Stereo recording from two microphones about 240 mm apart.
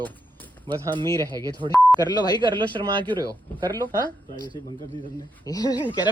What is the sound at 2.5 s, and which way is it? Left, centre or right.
Speech, centre.